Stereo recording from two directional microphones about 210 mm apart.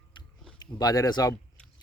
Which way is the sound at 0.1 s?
20° left (ahead or behind).